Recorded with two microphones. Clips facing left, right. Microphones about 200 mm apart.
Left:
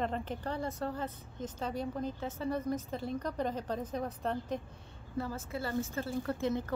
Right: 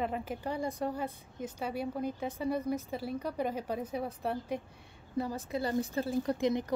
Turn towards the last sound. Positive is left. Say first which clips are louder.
# right 3 dB
turn(degrees=-15)  # may be behind; listen again after turning